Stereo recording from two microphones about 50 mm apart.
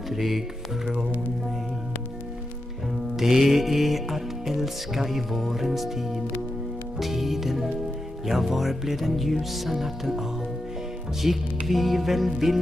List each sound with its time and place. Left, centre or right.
0.1 s music: centre
3.2 s music: centre